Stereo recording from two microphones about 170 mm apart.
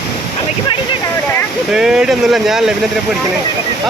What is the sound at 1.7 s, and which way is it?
Speech, 5° right (ahead or behind).